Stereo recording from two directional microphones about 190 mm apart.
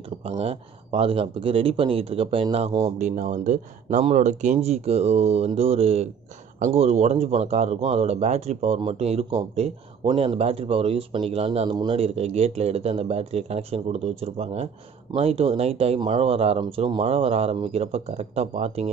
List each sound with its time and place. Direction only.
0.2 s speech: 35° right (ahead or behind)
3.0 s speech: 40° right (ahead or behind)